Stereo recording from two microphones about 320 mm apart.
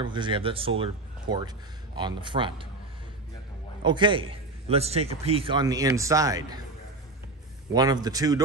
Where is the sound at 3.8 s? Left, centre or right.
Centre.